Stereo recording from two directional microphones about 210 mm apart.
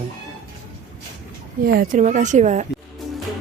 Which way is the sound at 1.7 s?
40° right (ahead or behind).